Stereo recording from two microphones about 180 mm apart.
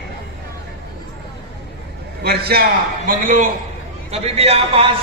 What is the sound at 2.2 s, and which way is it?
A man's voice, 60° right (ahead or behind).